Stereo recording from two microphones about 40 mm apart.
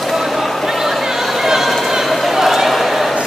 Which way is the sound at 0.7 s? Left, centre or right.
Centre.